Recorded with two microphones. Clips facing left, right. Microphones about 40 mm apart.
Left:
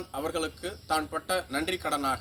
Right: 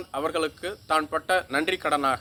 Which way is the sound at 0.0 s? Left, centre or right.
Right.